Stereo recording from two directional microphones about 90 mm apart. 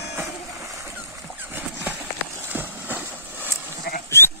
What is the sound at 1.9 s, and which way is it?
Clip-clop, 20° right (ahead or behind).